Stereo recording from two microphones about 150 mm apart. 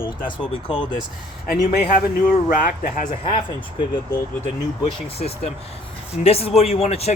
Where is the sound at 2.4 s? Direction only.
65° left (ahead or behind).